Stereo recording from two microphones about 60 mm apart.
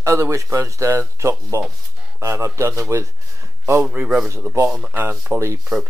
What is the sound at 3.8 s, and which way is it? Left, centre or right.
Speech, right.